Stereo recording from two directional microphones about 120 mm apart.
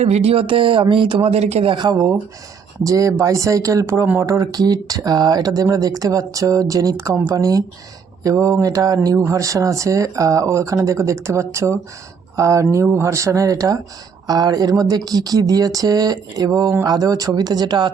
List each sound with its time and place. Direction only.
0.0 s speech: 60° right (ahead or behind)
1.7 s speech: 35° right (ahead or behind)